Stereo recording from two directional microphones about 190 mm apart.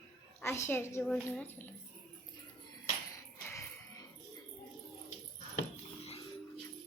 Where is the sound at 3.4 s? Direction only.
15° left (ahead or behind).